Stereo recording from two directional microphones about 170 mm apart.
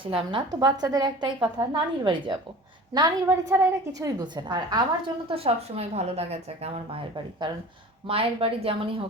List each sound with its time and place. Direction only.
0.3 s a woman's voice: 25° right (ahead or behind)
8.0 s speech: 35° right (ahead or behind)